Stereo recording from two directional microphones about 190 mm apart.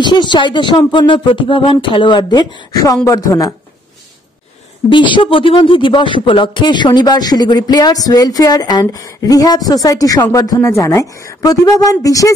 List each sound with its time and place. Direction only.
0.0 s speech: 25° left (ahead or behind)
5.1 s speech: 25° left (ahead or behind)